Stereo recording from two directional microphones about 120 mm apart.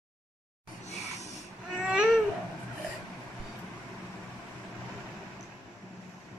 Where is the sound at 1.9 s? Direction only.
5° right (ahead or behind).